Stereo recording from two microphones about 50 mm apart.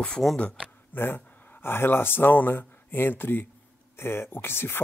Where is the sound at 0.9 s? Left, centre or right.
Left.